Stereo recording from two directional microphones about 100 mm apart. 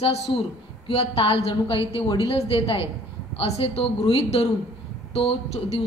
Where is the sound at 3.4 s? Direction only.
85° left.